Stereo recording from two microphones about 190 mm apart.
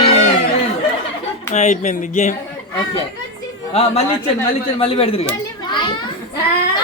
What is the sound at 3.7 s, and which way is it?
A child's voice, 30° left (ahead or behind).